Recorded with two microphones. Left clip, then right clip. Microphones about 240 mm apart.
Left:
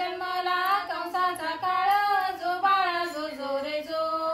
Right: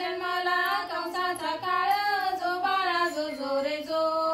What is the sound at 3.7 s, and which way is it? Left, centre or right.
Chant, centre.